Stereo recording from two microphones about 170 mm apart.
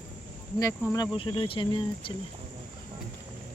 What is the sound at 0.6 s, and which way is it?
Speech, 20° left (ahead or behind).